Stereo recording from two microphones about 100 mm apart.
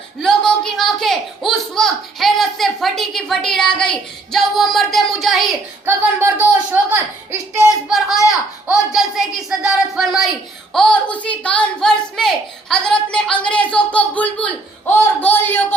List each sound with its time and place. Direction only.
0.2 s a sound: 5° left (ahead or behind)
5.8 s speech: 20° right (ahead or behind)
7.7 s speech: centre (ahead or behind)
10.8 s a woman's voice: 10° left (ahead or behind)